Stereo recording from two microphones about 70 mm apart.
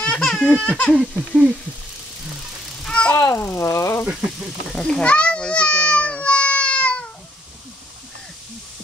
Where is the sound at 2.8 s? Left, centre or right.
Centre.